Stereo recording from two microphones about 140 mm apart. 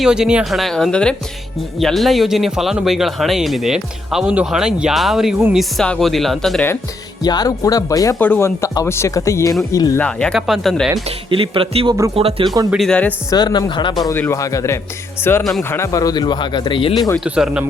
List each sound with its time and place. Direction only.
0.0 s speech: 5° right (ahead or behind)
7.2 s speech: 30° left (ahead or behind)
10.0 s speech: 5° left (ahead or behind)
11.3 s speech: 40° right (ahead or behind)
12.7 s speech: 5° left (ahead or behind)
13.3 s speech: 30° left (ahead or behind)
14.0 s speech: 20° left (ahead or behind); by 16.9 s 35° left (ahead or behind)
17.2 s speech: 5° right (ahead or behind)